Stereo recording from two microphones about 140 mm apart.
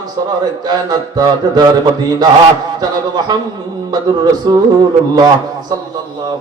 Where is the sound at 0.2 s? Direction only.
30° right (ahead or behind).